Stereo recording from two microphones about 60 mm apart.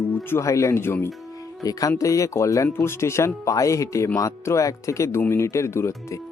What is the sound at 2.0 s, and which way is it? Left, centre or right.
Speech, left.